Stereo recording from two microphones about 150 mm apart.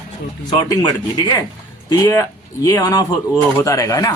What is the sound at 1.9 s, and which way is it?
A man's voice, 25° left (ahead or behind).